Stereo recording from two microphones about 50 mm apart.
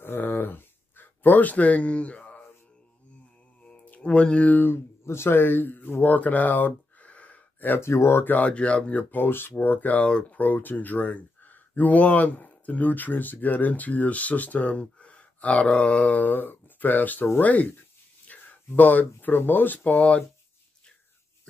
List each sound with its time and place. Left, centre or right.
0.0 s a sound: left
3.6 s a sound: left
4.6 s speech: left
7.8 s speech: left
8.2 s speech: left
8.5 s speech: left
9.1 s speech: left
10.4 s speech: left